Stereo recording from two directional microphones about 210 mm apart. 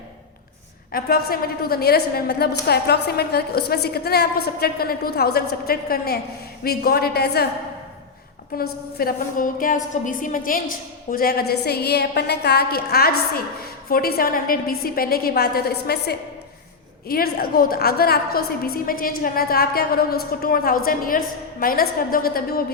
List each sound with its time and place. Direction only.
0.9 s a woman's voice: 45° left (ahead or behind)
8.5 s a woman's voice: 45° left (ahead or behind)